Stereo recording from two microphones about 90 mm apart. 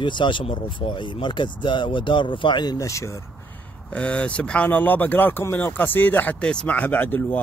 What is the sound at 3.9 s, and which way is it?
Speech, 10° left (ahead or behind).